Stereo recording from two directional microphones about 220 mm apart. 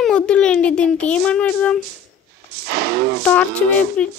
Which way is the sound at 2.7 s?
45° right (ahead or behind).